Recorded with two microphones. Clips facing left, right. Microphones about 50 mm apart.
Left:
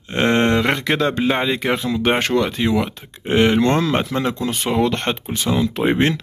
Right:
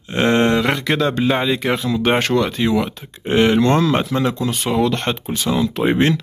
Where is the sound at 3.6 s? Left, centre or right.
Left.